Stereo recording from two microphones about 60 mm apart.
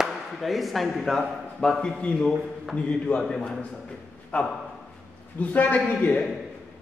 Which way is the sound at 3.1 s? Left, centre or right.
Centre.